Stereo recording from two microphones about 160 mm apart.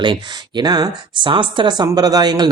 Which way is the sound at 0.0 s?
30° right (ahead or behind).